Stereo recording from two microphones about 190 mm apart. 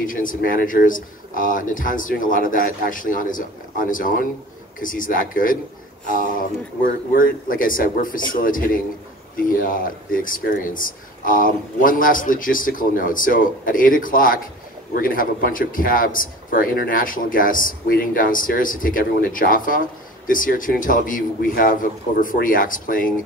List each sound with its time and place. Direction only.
0.0 s speech: 45° left (ahead or behind)
4.8 s speech: 45° left (ahead or behind)
7.2 s speech: 45° left (ahead or behind)